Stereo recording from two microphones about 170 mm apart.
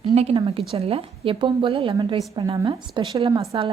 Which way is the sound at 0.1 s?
40° right (ahead or behind).